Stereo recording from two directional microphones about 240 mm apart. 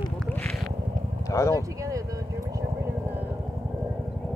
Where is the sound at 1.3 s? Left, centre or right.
Centre.